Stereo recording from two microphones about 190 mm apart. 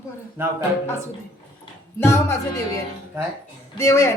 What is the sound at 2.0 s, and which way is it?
Speech, 15° left (ahead or behind).